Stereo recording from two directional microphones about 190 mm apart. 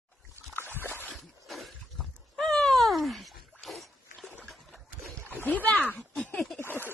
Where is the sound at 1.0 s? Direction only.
Centre (ahead or behind).